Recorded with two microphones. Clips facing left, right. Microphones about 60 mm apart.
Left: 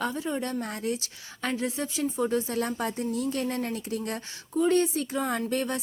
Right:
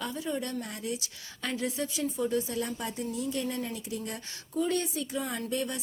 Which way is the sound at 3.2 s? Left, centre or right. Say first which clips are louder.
Left 2 dB; left.